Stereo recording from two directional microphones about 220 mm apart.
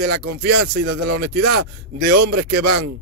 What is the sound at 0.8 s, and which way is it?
Speech, 90° right.